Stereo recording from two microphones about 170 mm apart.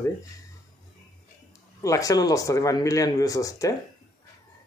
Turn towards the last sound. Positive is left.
turn(degrees=20)  # may be behind; listen again after turning